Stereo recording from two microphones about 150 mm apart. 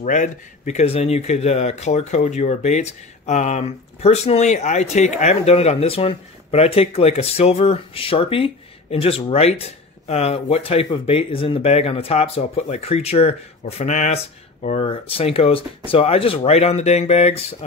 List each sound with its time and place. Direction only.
0.0 s speech: 60° left (ahead or behind)